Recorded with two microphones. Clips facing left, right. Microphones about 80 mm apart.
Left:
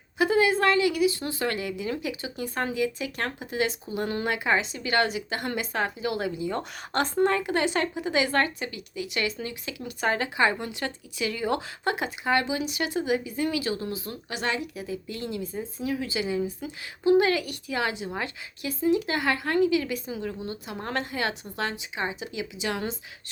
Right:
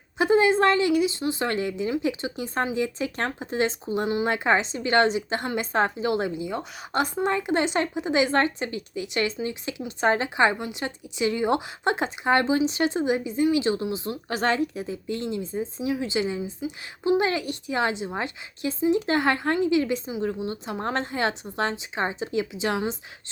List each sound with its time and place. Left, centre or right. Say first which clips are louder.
0.2 s speech: right 3 dB; right
4.3 s speech: right 1 dB; right
6.5 s speech: right 1 dB; centre
14.3 s a woman's voice: right 6 dB; right